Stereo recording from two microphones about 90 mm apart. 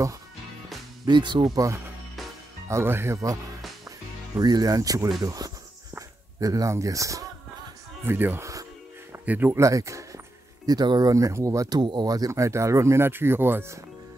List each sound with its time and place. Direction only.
1.0 s speech: 60° right (ahead or behind)
1.5 s speech: 40° right (ahead or behind)
2.7 s speech: 25° right (ahead or behind)
4.4 s speech: 50° right (ahead or behind)
8.0 s speech: 25° right (ahead or behind)
9.1 s music: 20° right (ahead or behind)
9.5 s speech: 35° right (ahead or behind)
10.7 s speech: 45° right (ahead or behind); by 13.7 s 25° right (ahead or behind)